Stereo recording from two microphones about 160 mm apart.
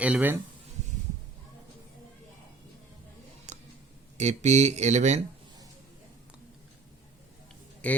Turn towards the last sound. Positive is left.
turn(degrees=10)  # may be behind; listen again after turning